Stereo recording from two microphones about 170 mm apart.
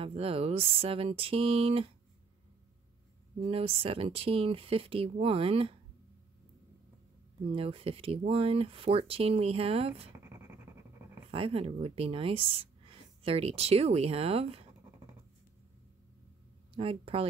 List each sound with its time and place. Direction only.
0.0 s speech: 35° right (ahead or behind)
3.3 s speech: 35° right (ahead or behind)
7.4 s speech: 35° right (ahead or behind)
10.2 s a sound: 15° right (ahead or behind)
11.2 s speech: 35° right (ahead or behind)
16.7 s speech: 35° right (ahead or behind)